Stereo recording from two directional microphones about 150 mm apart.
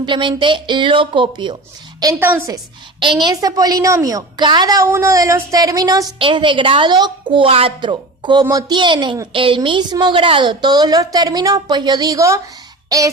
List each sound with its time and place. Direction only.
0.0 s speech: 30° right (ahead or behind)
2.1 s a woman's voice: 15° right (ahead or behind)
3.0 s a woman's voice: 30° right (ahead or behind)